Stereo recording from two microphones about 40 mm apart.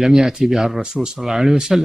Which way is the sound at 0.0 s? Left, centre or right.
Centre.